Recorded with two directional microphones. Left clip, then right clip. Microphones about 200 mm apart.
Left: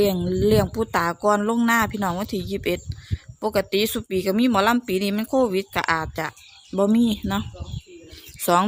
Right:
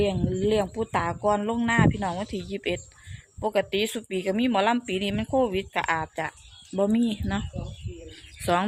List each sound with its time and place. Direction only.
0.0 s speech: 30° left (ahead or behind)
8.5 s speech: 20° left (ahead or behind)